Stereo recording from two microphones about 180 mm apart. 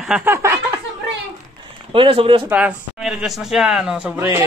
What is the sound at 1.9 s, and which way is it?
Speech, 30° right (ahead or behind).